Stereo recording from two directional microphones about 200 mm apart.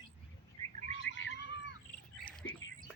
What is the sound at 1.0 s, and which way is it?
Cat, 65° left (ahead or behind).